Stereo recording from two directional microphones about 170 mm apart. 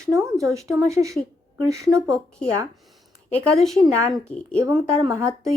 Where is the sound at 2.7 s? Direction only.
Centre (ahead or behind).